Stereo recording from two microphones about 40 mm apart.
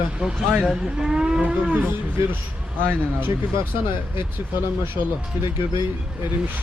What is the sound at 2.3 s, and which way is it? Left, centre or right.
Speech, right.